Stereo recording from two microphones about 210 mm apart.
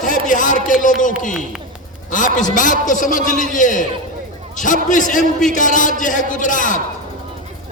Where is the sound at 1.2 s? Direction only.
35° left (ahead or behind).